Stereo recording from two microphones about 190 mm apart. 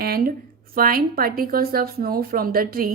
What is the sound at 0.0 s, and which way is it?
A woman's voice, 50° right (ahead or behind).